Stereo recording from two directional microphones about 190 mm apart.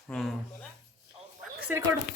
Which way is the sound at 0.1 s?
Centre (ahead or behind).